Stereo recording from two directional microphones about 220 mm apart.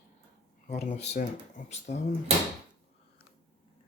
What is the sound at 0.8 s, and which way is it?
Speech, 30° left (ahead or behind).